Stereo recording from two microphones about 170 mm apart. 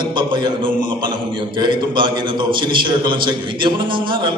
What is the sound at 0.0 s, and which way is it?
A man's voice, 25° right (ahead or behind).